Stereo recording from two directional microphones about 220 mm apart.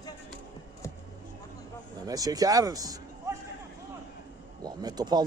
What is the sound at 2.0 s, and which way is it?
Speech, 15° right (ahead or behind).